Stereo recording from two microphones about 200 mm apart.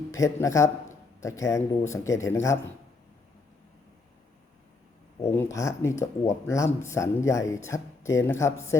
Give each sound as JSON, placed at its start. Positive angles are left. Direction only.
{"t": 0.1, "sound": "a man's voice", "side_deg": 15}
{"t": 5.4, "sound": "speech", "side_deg": 15}